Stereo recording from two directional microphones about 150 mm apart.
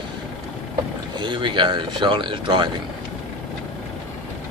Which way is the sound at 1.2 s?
30° right (ahead or behind).